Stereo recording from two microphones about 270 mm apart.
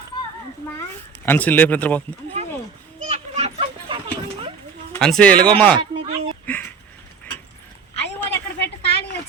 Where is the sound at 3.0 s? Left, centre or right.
Right.